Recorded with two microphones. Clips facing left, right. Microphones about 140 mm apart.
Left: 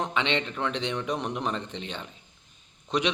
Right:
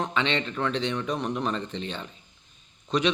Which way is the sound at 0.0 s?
15° left (ahead or behind).